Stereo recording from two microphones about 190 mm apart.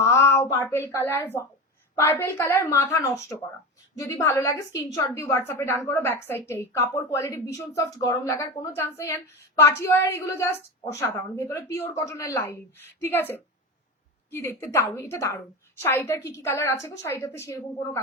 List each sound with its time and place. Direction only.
0.0 s a woman's voice: 15° left (ahead or behind)